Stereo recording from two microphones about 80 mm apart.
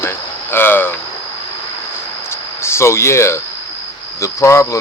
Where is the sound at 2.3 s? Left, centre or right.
Left.